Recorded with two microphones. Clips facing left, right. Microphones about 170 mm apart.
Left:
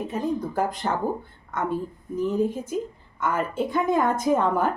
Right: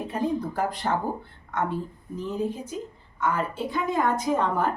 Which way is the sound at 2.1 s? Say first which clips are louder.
Left 5 dB; 50° left (ahead or behind).